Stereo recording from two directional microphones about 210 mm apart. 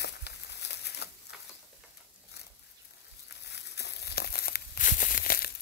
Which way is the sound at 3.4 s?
55° left (ahead or behind).